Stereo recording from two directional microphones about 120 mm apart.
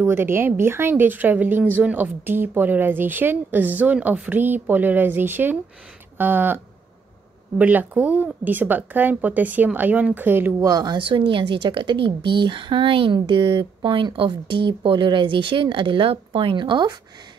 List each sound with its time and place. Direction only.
0.0 s speech: 20° right (ahead or behind)
10.6 s a woman's voice: 30° right (ahead or behind)